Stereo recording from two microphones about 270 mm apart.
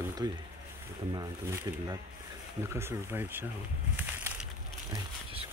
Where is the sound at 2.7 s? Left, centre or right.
Centre.